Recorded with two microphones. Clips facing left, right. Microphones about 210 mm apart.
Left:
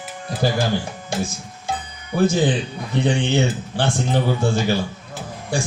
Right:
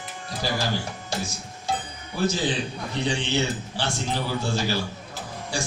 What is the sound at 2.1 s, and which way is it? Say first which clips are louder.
Speech: left 7 dB; 55° left (ahead or behind).